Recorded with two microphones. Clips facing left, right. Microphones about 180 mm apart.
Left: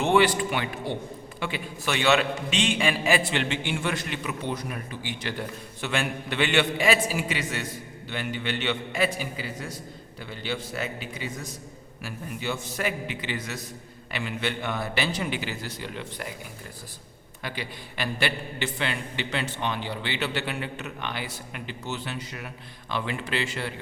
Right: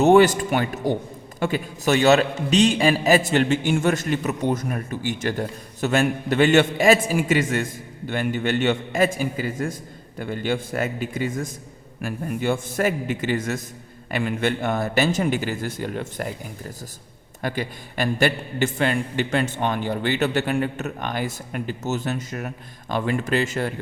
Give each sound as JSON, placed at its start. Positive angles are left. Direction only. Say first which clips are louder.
{"t": 0.0, "sound": "a man's voice", "louder": "right 7 dB", "side_deg": -45}